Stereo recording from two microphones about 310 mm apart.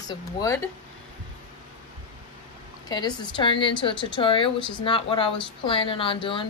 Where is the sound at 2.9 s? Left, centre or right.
Centre.